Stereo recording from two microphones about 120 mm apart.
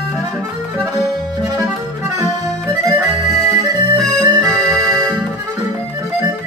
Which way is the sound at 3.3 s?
30° right (ahead or behind).